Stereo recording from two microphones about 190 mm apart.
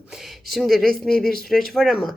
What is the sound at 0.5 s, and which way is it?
Speech, centre (ahead or behind).